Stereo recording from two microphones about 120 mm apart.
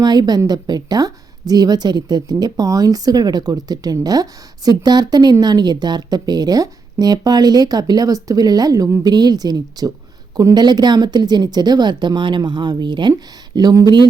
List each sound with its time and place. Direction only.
0.0 s a woman's voice: 35° right (ahead or behind)